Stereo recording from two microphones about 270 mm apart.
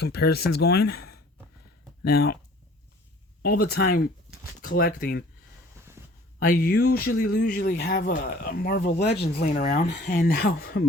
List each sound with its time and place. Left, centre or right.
0.3 s speech: left
3.4 s speech: left
6.4 s speech: left